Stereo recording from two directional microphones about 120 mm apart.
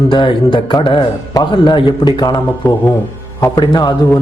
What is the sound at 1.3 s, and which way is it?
A man's voice, 35° left (ahead or behind).